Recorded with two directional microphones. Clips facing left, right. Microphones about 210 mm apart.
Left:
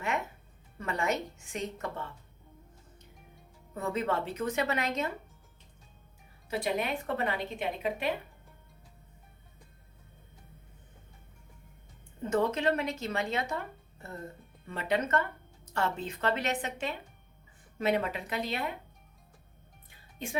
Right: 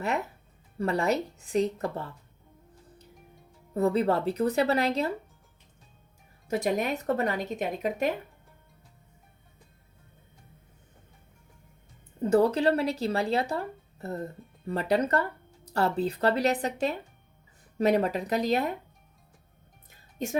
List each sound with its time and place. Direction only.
0.8 s speech: 35° right (ahead or behind)
3.8 s speech: 35° right (ahead or behind)
6.5 s speech: 45° right (ahead or behind)
12.2 s speech: 35° right (ahead or behind)
19.9 s music: 40° right (ahead or behind)